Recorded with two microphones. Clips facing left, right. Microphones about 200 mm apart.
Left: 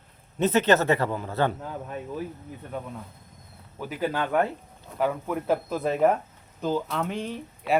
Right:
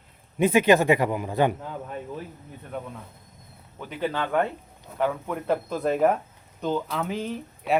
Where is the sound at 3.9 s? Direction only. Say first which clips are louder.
Even; 5° left (ahead or behind).